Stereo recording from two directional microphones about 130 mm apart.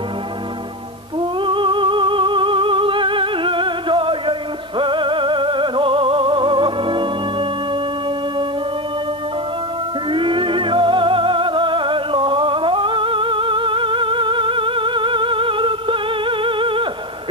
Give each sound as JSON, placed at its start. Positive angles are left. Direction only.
{"t": 1.4, "sound": "music", "side_deg": -40}
{"t": 10.1, "sound": "music", "side_deg": -40}